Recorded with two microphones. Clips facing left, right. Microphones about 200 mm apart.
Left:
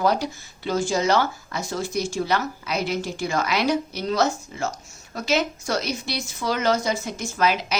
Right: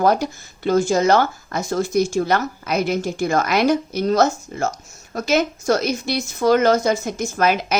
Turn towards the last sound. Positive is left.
turn(degrees=-50)  # may be behind; listen again after turning